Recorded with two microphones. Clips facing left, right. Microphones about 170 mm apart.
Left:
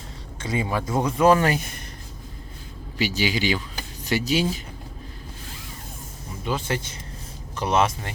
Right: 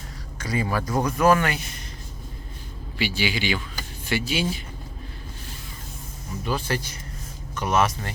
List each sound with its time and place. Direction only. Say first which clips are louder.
0.3 s speech: even; 25° left (ahead or behind)
1.5 s speech: left 4 dB; 50° left (ahead or behind)
3.0 s speech: left 2 dB; 40° left (ahead or behind)
6.4 s speech: even; 20° left (ahead or behind)